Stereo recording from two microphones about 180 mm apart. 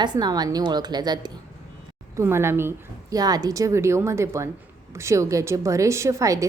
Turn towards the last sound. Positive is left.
turn(degrees=-15)  # may be behind; listen again after turning